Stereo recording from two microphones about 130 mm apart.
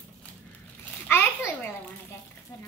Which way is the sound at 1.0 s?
15° left (ahead or behind).